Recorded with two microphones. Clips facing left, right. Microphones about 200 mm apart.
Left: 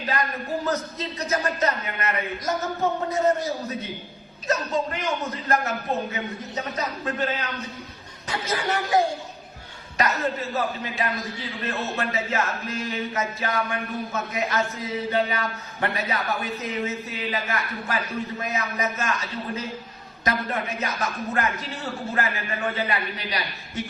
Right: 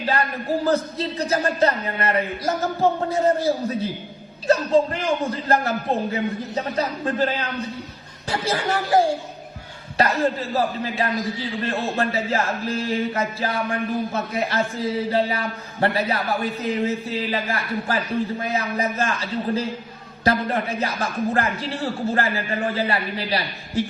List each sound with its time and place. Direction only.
0.6 s speech: 30° right (ahead or behind)
8.3 s speech: 35° right (ahead or behind)